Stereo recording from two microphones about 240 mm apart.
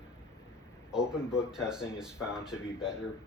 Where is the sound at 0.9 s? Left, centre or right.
Centre.